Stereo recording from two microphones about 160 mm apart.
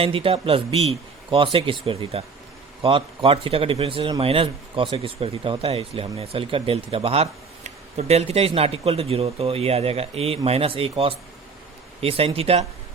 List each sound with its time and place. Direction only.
0.0 s a man's voice: 35° right (ahead or behind)